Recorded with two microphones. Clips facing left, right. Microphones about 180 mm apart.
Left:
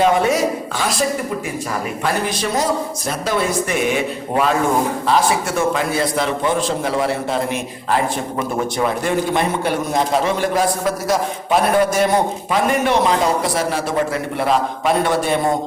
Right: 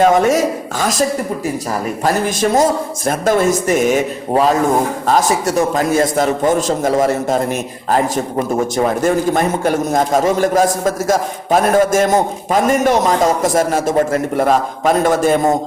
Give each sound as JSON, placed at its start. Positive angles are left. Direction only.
{"t": 0.0, "sound": "speech", "side_deg": -45}
{"t": 2.0, "sound": "a man's voice", "side_deg": -45}